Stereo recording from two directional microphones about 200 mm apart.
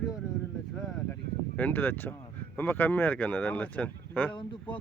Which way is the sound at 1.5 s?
10° left (ahead or behind).